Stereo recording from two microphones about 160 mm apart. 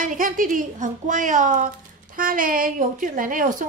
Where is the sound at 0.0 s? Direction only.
55° right (ahead or behind).